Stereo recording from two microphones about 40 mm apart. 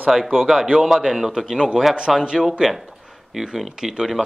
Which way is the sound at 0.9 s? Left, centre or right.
Centre.